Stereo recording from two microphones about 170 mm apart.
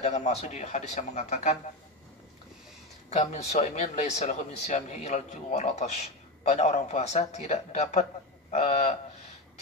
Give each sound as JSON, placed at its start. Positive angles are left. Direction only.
{"t": 0.0, "sound": "a man's voice", "side_deg": 40}
{"t": 3.1, "sound": "a man's voice", "side_deg": 40}